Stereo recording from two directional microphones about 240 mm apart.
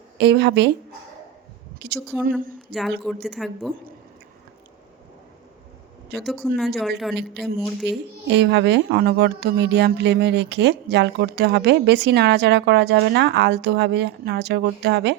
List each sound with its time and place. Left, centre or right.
0.2 s speech: right
1.8 s speech: right
2.3 s a woman's voice: centre
6.1 s speech: centre
8.3 s speech: right